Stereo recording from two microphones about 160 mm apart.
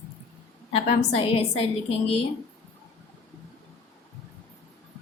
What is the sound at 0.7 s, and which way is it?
Speech, 40° left (ahead or behind).